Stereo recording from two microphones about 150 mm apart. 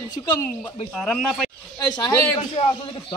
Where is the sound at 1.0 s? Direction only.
Centre (ahead or behind).